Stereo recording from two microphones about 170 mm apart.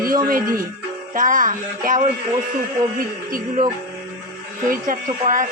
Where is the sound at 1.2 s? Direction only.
50° right (ahead or behind).